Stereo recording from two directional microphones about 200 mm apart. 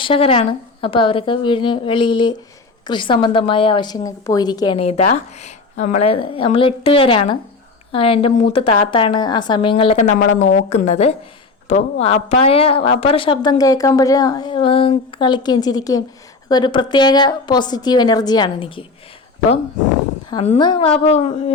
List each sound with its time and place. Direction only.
0.0 s a woman's voice: 30° left (ahead or behind)
20.6 s a woman's voice: 25° left (ahead or behind)